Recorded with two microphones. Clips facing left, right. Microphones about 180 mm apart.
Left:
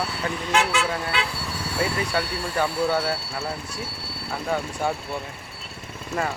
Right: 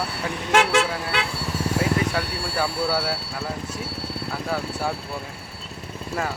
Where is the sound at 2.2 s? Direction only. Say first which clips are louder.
Left 1 dB; 5° right (ahead or behind).